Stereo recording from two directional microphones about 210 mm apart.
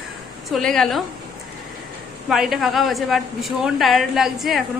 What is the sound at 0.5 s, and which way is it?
Speech, centre (ahead or behind).